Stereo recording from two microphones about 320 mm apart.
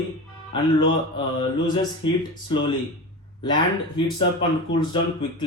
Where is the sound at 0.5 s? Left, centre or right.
Centre.